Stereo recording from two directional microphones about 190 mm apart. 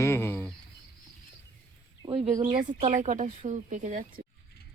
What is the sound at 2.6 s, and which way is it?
Speech, 40° right (ahead or behind).